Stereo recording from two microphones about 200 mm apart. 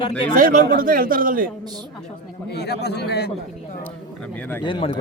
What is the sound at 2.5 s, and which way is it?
Speech, 55° left (ahead or behind).